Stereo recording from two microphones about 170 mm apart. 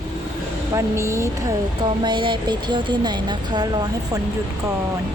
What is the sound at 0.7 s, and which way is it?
Speech, 15° right (ahead or behind).